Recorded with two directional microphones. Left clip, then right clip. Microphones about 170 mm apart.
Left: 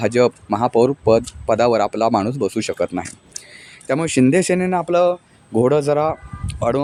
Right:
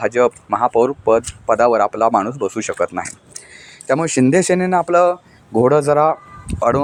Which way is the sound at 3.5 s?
Centre (ahead or behind).